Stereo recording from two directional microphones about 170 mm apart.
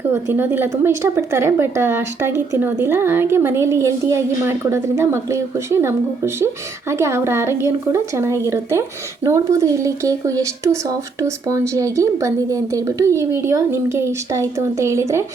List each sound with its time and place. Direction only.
0.0 s a woman's voice: 15° right (ahead or behind)